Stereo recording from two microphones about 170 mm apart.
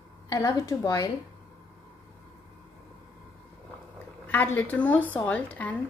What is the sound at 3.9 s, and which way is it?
Speech, 10° left (ahead or behind).